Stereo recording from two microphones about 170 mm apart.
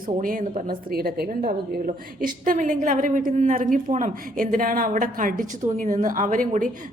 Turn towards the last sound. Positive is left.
turn(degrees=-50)  # may be behind; listen again after turning